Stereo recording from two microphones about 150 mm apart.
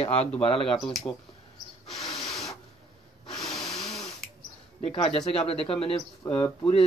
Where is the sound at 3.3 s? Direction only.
5° left (ahead or behind).